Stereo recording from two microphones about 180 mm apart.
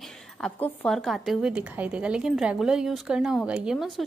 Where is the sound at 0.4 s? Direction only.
5° left (ahead or behind).